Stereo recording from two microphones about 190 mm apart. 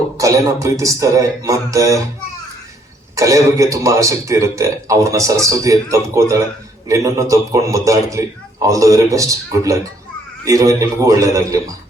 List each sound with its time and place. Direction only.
0.2 s speech: 15° right (ahead or behind)
3.2 s speech: 15° right (ahead or behind)